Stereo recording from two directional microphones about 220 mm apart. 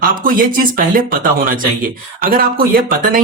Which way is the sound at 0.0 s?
40° right (ahead or behind).